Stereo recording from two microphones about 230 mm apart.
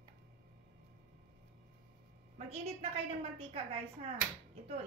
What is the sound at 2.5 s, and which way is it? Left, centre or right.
Speech, right.